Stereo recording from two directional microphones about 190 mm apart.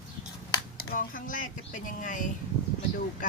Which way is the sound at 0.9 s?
45° left (ahead or behind).